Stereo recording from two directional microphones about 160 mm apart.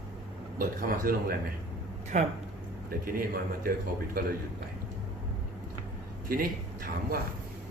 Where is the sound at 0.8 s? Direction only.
65° right (ahead or behind).